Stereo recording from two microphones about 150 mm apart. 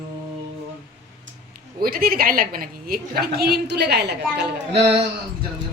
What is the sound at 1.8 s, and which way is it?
A woman's voice, 75° right (ahead or behind).